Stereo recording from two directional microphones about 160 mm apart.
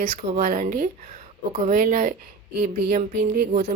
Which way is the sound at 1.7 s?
65° right (ahead or behind).